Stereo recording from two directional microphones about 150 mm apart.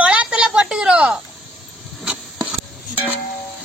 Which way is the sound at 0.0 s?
10° right (ahead or behind).